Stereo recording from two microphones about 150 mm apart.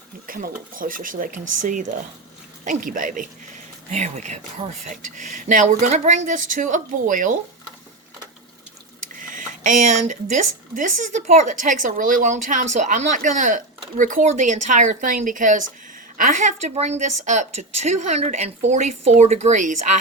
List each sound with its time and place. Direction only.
0.3 s a woman's voice: 70° right (ahead or behind)
9.0 s a woman's voice: 60° right (ahead or behind)